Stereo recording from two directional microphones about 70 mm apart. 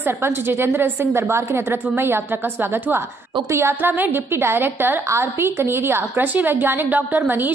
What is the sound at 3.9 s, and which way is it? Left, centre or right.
A woman's voice, right.